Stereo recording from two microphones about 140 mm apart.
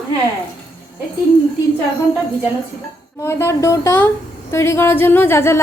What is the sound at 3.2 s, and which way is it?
A woman's voice, 20° left (ahead or behind).